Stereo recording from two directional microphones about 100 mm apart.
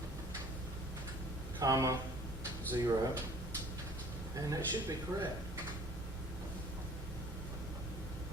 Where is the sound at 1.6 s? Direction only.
35° right (ahead or behind).